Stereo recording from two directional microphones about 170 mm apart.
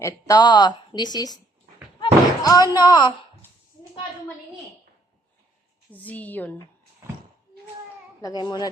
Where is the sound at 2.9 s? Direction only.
25° left (ahead or behind).